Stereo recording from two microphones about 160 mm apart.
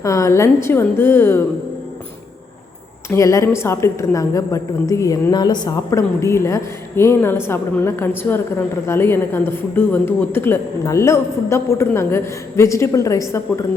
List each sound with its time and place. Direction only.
0.0 s a woman's voice: 20° left (ahead or behind)
3.1 s a woman's voice: 20° left (ahead or behind)